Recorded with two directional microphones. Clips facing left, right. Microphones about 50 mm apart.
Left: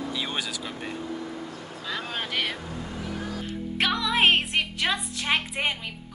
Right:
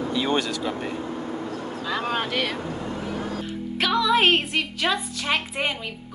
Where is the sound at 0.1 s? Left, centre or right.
Centre.